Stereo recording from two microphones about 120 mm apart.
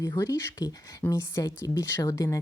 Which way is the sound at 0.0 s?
25° left (ahead or behind).